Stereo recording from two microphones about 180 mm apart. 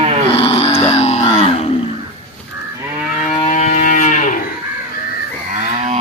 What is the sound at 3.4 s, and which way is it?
Cattle, 40° left (ahead or behind).